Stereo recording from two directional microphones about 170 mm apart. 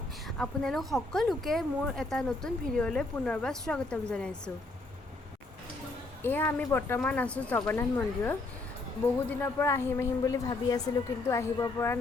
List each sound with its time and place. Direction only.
0.3 s speech: 5° left (ahead or behind)
6.2 s speech: 10° left (ahead or behind)